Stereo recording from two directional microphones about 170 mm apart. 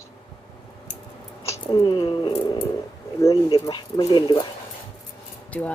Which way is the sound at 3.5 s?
25° left (ahead or behind).